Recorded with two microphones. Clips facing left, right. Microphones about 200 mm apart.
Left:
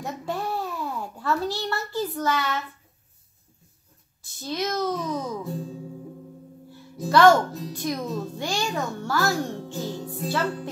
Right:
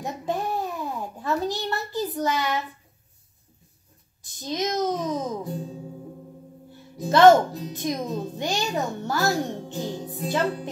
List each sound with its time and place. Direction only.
0.0 s babbling: 15° right (ahead or behind)
4.2 s a child's voice: 20° right (ahead or behind)
5.4 s music: centre (ahead or behind)
7.1 s a child's voice: 20° right (ahead or behind)
10.2 s music: 15° right (ahead or behind)